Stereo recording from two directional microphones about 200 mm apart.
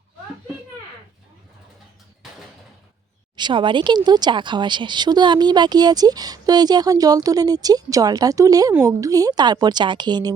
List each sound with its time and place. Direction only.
3.3 s speech: 25° right (ahead or behind)